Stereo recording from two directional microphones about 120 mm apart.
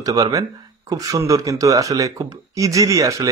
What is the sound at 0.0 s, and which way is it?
Speech, 30° right (ahead or behind).